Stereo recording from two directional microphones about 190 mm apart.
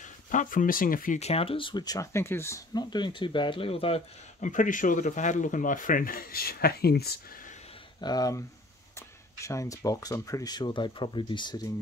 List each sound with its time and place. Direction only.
0.0 s speech: 40° left (ahead or behind)
8.0 s speech: 20° left (ahead or behind)